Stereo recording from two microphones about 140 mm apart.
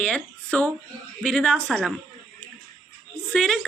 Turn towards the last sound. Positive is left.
turn(degrees=5)  # may be behind; listen again after turning